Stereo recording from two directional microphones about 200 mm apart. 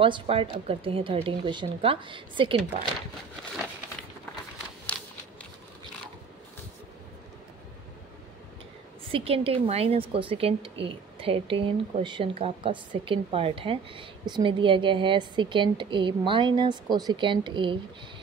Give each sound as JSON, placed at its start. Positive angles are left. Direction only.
{"t": 0.0, "sound": "a woman's voice", "side_deg": -25}
{"t": 9.1, "sound": "a woman's voice", "side_deg": -30}